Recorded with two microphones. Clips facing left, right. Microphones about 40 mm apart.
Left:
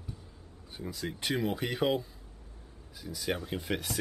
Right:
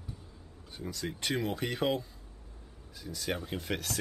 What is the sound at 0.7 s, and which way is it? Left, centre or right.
Speech, centre.